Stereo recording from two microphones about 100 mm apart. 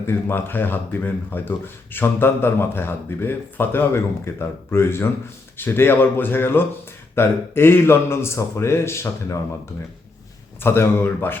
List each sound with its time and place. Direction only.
0.0 s speech: 25° left (ahead or behind)
10.6 s speech: 25° left (ahead or behind)